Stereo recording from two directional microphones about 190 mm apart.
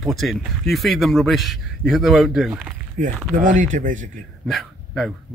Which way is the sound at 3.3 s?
40° right (ahead or behind).